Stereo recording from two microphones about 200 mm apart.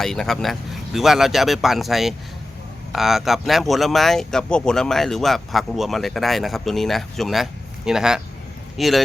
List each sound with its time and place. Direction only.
0.0 s speech: centre (ahead or behind)